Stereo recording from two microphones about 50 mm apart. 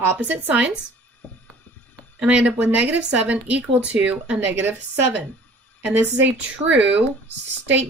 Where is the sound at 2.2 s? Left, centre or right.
Right.